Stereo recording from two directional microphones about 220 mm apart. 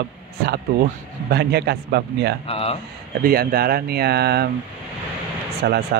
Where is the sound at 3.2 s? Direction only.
45° right (ahead or behind).